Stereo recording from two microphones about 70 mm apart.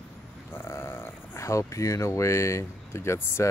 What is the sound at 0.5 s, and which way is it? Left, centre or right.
Speech, left.